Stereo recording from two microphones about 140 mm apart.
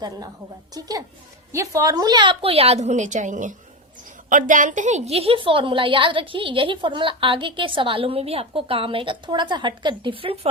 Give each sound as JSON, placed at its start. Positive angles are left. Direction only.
{"t": 0.7, "sound": "a woman's voice", "side_deg": -25}